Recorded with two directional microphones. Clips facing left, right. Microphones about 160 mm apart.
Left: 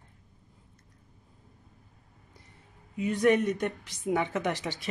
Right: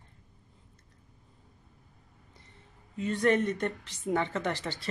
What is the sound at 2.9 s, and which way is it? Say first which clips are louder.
A woman's voice: left 2 dB; 10° left (ahead or behind).